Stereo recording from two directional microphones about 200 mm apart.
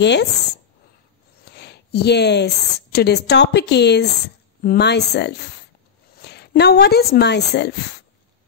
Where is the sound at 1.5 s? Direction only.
55° left (ahead or behind).